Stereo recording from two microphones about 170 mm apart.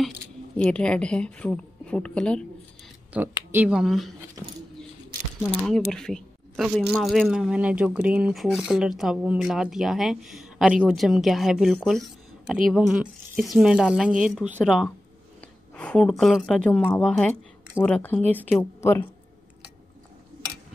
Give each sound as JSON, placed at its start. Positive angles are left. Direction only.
{"t": 0.6, "sound": "speech", "side_deg": 5}
{"t": 3.1, "sound": "speech", "side_deg": -10}
{"t": 4.4, "sound": "speech", "side_deg": -20}
{"t": 5.4, "sound": "speech", "side_deg": 0}
{"t": 15.7, "sound": "speech", "side_deg": 5}